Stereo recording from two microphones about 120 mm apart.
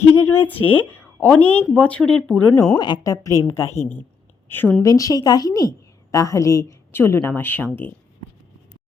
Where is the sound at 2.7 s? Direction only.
35° left (ahead or behind); by 4.6 s 20° left (ahead or behind).